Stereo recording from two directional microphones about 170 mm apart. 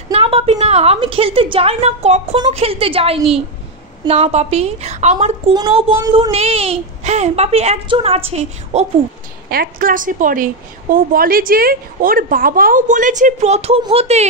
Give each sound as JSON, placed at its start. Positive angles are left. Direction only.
{"t": 0.1, "sound": "a woman's voice", "side_deg": -35}
{"t": 6.0, "sound": "child singing", "side_deg": -20}
{"t": 6.3, "sound": "a woman's voice", "side_deg": -35}
{"t": 9.5, "sound": "a woman's voice", "side_deg": -60}